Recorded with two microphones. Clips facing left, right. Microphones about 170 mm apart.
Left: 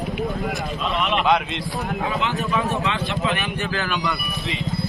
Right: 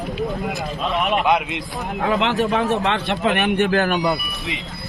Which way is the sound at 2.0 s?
80° right.